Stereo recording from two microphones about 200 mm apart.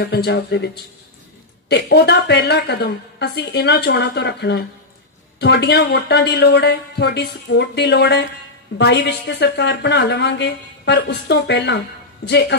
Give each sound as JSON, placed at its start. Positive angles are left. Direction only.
{"t": 0.0, "sound": "speech", "side_deg": 50}
{"t": 1.7, "sound": "speech", "side_deg": 55}